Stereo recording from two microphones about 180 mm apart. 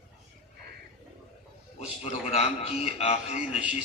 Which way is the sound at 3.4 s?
5° right (ahead or behind).